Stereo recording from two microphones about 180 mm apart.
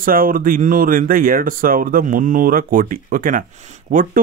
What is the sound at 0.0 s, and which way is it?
Speech, 50° right (ahead or behind).